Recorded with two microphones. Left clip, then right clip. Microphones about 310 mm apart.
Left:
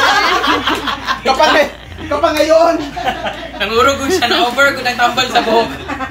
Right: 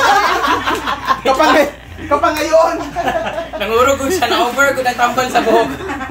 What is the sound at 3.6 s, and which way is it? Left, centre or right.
Speech, right.